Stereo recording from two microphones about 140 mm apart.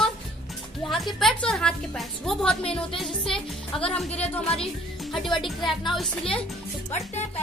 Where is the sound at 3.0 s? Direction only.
Centre (ahead or behind).